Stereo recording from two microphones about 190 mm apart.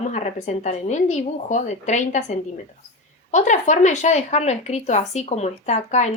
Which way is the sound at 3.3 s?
40° left (ahead or behind).